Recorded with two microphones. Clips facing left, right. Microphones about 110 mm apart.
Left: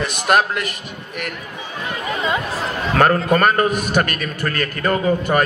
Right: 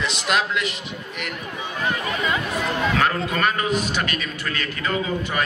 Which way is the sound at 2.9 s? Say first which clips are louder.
Left 7 dB; 50° left (ahead or behind).